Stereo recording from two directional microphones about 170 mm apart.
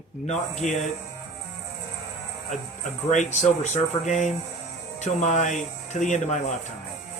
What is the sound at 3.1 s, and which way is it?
Speech, 45° left (ahead or behind).